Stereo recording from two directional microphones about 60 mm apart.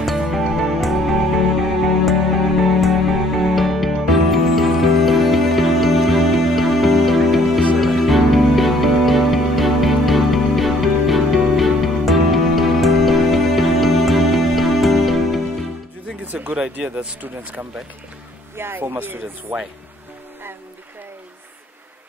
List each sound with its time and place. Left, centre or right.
0.0 s music: centre
16.3 s a sound: right
17.2 s speech: right